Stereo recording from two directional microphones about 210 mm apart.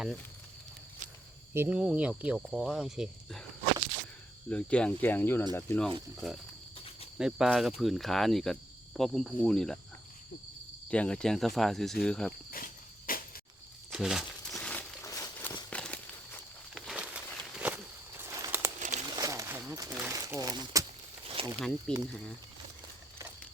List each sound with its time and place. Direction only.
1.5 s speech: 5° right (ahead or behind)
4.4 s speech: 5° left (ahead or behind)
6.1 s speech: 5° right (ahead or behind)
10.8 s speech: 5° left (ahead or behind)
12.5 s cricket: 40° left (ahead or behind)
13.9 s crumpling: centre (ahead or behind)
17.5 s walk: 5° right (ahead or behind)
18.2 s a sound: 15° right (ahead or behind)
18.8 s crumpling: 35° right (ahead or behind)
19.1 s a sound: 15° right (ahead or behind)
20.1 s crumpling: 15° right (ahead or behind)
21.2 s snake: 25° right (ahead or behind)
21.9 s speech: 5° left (ahead or behind)